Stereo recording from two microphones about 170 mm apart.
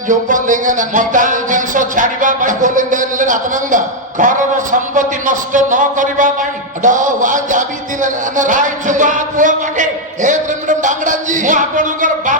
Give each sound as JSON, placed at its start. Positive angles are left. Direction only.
{"t": 0.1, "sound": "music", "side_deg": -50}